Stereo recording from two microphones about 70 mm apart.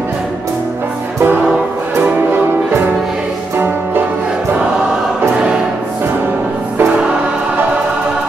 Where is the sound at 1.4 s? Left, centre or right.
Centre.